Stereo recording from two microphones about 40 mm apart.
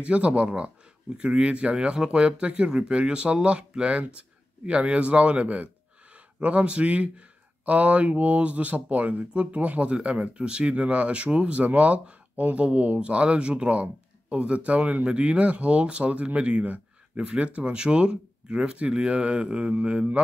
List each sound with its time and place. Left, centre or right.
0.0 s speech: right
16.6 s speech: right